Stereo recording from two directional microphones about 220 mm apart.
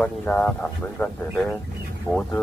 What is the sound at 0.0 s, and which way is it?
Speech, 5° left (ahead or behind).